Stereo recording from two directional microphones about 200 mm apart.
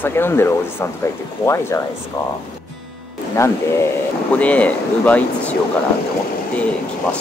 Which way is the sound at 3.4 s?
15° left (ahead or behind).